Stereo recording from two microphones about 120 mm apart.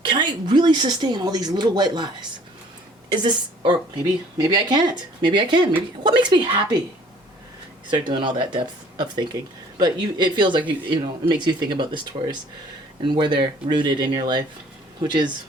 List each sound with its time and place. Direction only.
0.0 s a woman's voice: 35° right (ahead or behind)
3.1 s a woman's voice: 40° right (ahead or behind)
7.9 s a woman's voice: 40° right (ahead or behind)